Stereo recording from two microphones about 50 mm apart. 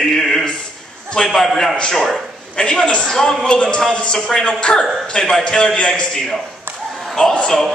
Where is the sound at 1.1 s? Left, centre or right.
Centre.